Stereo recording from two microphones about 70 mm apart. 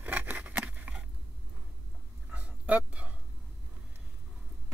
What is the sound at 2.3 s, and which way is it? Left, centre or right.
Dog, centre.